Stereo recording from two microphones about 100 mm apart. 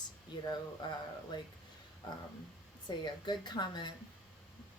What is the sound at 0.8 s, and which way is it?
Speech, 50° left (ahead or behind).